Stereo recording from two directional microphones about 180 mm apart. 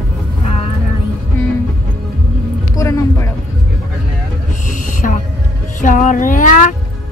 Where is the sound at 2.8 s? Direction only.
15° left (ahead or behind).